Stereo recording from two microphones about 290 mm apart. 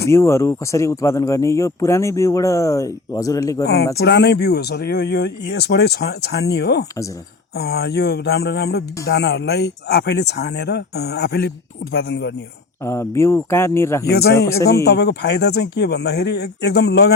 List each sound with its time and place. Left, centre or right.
0.1 s speech: centre
3.9 s speech: left
12.8 s speech: centre
14.1 s speech: left